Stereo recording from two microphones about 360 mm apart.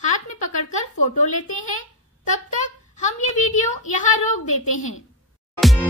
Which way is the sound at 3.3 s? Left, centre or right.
Centre.